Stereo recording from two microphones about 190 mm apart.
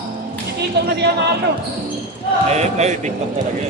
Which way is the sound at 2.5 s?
35° right (ahead or behind).